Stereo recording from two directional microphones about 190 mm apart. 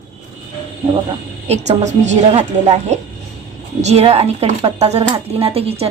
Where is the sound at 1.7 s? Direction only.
40° right (ahead or behind).